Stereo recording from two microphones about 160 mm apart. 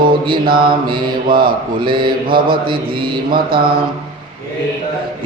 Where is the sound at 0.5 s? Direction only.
30° right (ahead or behind).